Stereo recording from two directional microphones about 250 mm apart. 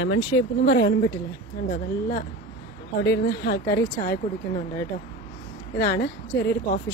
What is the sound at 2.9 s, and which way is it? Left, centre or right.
Speech, left.